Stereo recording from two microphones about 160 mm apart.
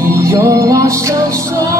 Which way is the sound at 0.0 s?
20° right (ahead or behind).